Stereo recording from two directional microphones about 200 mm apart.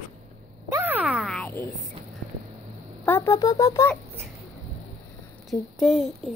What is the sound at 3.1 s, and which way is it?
Speech, 15° left (ahead or behind).